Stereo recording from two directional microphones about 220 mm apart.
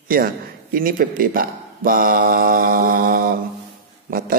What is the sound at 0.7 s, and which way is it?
Speech, 40° right (ahead or behind).